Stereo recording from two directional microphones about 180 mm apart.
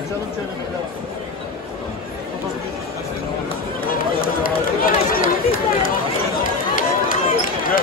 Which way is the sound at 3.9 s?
50° left (ahead or behind).